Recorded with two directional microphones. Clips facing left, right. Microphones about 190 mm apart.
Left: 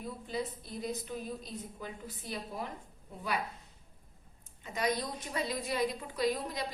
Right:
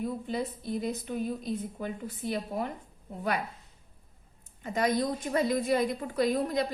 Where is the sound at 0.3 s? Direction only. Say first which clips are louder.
Right 5 dB; 55° right (ahead or behind).